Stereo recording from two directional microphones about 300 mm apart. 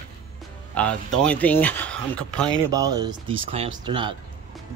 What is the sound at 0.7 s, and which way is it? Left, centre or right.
Speech, centre.